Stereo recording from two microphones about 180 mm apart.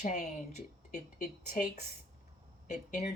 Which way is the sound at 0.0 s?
45° left (ahead or behind).